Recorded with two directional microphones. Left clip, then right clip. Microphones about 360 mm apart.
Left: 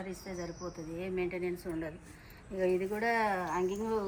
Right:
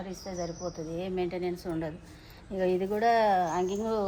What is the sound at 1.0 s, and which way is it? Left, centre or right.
Speech, right.